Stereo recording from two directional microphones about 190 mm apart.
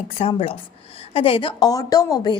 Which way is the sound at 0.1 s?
30° left (ahead or behind).